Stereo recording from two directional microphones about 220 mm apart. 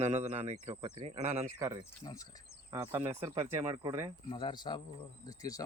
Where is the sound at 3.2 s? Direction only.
10° right (ahead or behind).